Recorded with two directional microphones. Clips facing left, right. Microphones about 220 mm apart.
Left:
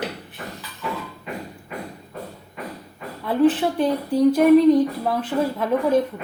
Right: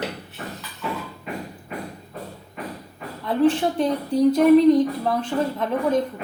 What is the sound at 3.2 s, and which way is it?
Speech, 5° left (ahead or behind).